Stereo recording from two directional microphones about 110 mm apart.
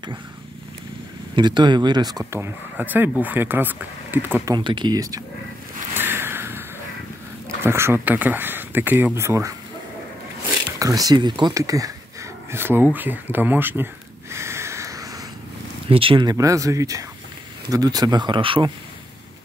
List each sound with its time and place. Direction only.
1.3 s speech: 45° right (ahead or behind)
2.4 s speech: 15° right (ahead or behind)
4.6 s speech: 45° right (ahead or behind)
5.9 s a sound: 20° right (ahead or behind)
7.6 s speech: 20° right (ahead or behind)
10.8 s speech: 35° right (ahead or behind)
11.5 s speech: 30° right (ahead or behind)
14.3 s a sound: 25° right (ahead or behind)
15.9 s speech: 55° right (ahead or behind)
16.3 s speech: 30° right (ahead or behind); by 18.7 s 50° right (ahead or behind)